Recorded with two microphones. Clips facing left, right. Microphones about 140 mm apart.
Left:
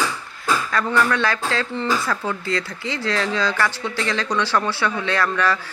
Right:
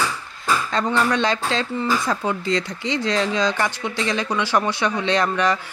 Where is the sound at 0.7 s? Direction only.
20° right (ahead or behind).